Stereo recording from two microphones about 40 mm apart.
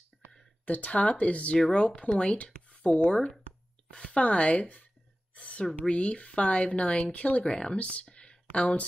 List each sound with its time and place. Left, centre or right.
0.7 s speech: left
7.5 s speech: left
7.8 s a sound: left
8.5 s speech: left